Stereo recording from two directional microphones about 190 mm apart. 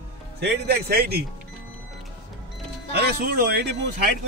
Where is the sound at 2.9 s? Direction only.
55° right (ahead or behind).